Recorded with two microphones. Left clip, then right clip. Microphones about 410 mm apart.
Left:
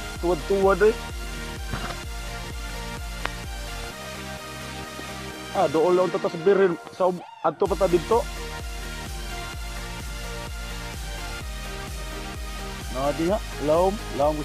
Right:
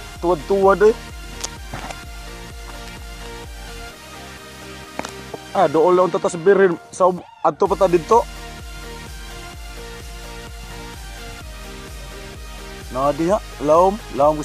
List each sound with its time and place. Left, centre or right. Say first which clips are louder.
0.3 s speech: right 6 dB; left
5.6 s speech: right 6 dB; left
12.9 s speech: right 6 dB; left